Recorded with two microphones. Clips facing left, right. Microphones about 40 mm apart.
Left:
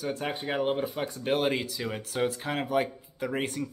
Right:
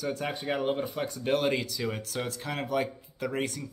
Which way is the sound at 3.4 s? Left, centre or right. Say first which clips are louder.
Left 2 dB; left.